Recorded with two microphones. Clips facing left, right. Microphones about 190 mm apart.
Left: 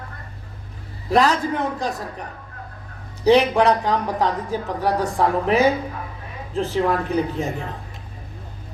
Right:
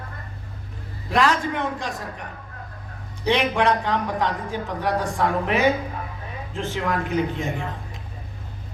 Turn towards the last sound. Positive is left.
turn(degrees=40)  # may be behind; listen again after turning